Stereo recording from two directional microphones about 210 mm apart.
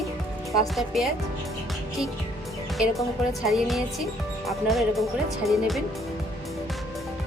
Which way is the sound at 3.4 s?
Centre (ahead or behind).